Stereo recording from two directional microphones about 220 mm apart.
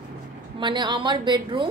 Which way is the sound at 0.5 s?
20° right (ahead or behind).